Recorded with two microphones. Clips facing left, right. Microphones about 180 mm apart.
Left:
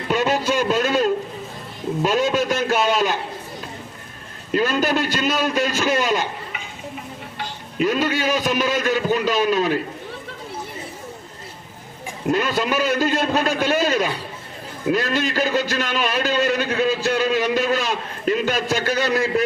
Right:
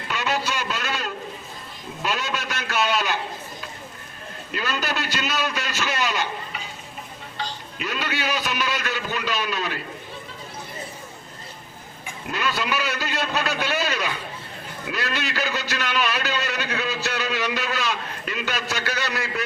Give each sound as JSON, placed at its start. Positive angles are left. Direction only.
{"t": 0.1, "sound": "a sound", "side_deg": 45}
{"t": 2.0, "sound": "a man's voice", "side_deg": 45}
{"t": 4.5, "sound": "a man's voice", "side_deg": 50}
{"t": 7.8, "sound": "a man's voice", "side_deg": 45}
{"t": 12.3, "sound": "a man's voice", "side_deg": 45}